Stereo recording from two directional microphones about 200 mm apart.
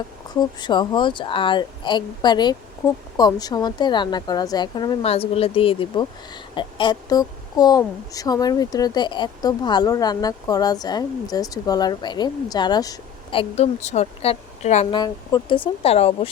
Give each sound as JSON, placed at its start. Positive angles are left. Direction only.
{"t": 0.3, "sound": "speech", "side_deg": 20}
{"t": 14.9, "sound": "speech", "side_deg": 20}